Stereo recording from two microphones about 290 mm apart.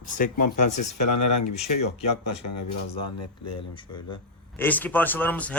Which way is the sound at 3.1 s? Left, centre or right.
Left.